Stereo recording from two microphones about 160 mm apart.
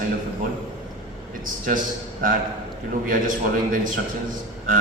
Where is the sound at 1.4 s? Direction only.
55° right (ahead or behind).